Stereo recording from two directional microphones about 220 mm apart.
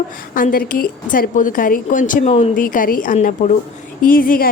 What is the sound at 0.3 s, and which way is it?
A woman's voice, 40° left (ahead or behind).